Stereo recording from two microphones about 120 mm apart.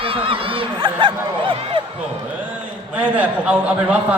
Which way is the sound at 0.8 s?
45° right (ahead or behind).